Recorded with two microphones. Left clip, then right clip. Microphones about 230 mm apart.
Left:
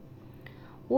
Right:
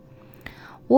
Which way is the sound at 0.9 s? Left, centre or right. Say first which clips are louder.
Right 10 dB; right.